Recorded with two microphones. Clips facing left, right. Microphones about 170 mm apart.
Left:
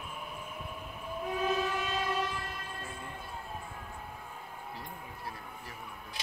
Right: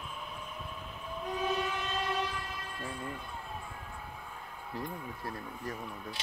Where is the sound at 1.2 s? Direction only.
5° left (ahead or behind).